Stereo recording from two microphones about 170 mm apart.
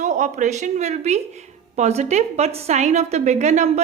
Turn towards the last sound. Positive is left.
turn(degrees=-40)  # may be behind; listen again after turning